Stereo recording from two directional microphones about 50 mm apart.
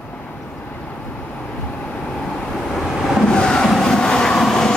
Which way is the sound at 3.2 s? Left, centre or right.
Centre.